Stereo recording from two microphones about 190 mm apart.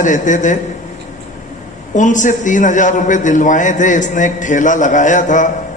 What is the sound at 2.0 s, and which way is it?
A man's voice, 40° left (ahead or behind).